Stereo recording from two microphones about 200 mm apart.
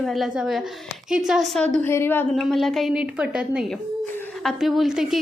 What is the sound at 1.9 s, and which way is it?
A woman's voice, 10° left (ahead or behind).